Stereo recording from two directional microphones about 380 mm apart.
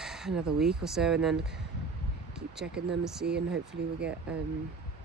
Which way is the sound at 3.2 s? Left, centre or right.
Right.